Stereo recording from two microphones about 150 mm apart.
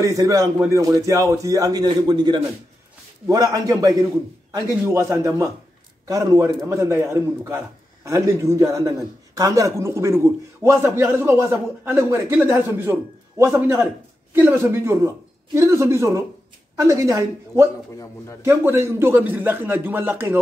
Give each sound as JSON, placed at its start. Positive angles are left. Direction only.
{"t": 0.0, "sound": "a man's voice", "side_deg": -20}